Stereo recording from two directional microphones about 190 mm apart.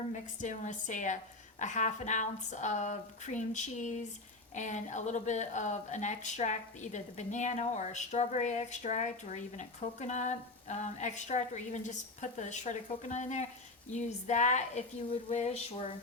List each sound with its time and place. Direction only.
0.1 s speech: 40° left (ahead or behind)